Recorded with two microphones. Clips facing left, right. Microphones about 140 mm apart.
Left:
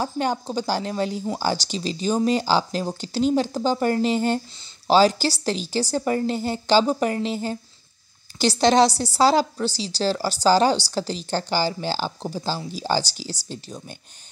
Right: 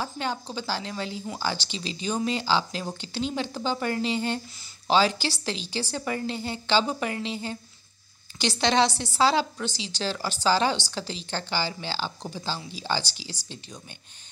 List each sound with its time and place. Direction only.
0.0 s a woman's voice: 45° left (ahead or behind)